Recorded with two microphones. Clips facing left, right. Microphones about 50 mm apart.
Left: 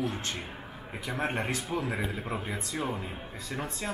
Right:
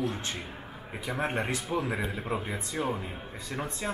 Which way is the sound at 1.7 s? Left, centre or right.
Centre.